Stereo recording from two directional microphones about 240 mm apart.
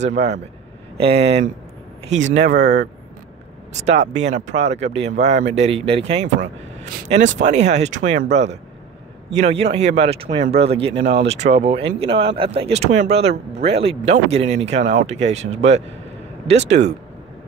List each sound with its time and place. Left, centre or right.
0.0 s speech: right